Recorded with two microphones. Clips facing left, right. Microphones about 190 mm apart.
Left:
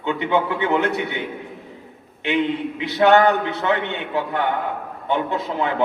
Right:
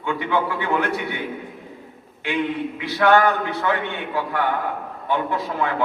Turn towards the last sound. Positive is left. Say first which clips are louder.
# left 1 dB
turn(degrees=20)  # may be behind; listen again after turning